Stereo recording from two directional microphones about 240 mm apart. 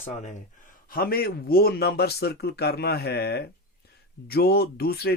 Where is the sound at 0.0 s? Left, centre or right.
Left.